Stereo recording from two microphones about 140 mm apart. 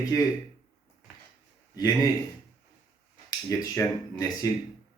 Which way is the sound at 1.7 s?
25° left (ahead or behind).